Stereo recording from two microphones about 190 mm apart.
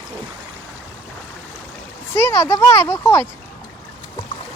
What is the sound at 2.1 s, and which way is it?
Speech, 15° left (ahead or behind).